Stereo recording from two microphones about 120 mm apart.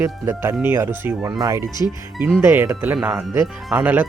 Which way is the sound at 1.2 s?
30° right (ahead or behind).